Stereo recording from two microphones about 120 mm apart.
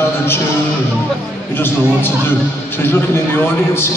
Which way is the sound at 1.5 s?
20° left (ahead or behind).